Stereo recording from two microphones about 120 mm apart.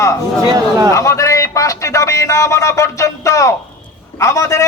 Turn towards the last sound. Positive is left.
turn(degrees=25)  # may be behind; listen again after turning